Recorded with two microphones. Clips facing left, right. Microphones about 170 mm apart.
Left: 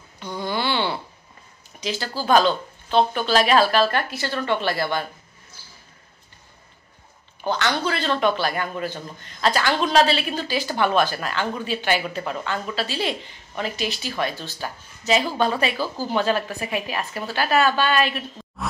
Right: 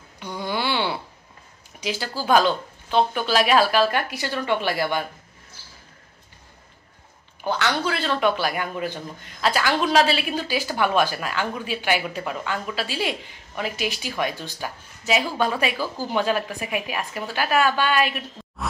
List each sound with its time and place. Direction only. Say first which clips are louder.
0.2 s a sound: left 1 dB; 10° right (ahead or behind)
1.8 s a man's voice: left 1 dB; 10° right (ahead or behind)
7.4 s a man's voice: left 1 dB; 5° right (ahead or behind)